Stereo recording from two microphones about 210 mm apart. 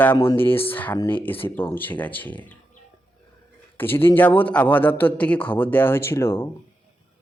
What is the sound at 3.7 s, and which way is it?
Speech, 10° left (ahead or behind).